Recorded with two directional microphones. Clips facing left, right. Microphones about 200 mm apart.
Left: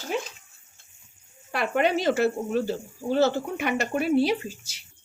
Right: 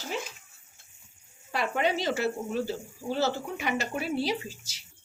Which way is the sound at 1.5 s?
60° left (ahead or behind).